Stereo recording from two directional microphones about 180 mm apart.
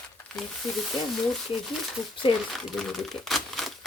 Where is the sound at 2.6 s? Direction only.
Centre (ahead or behind).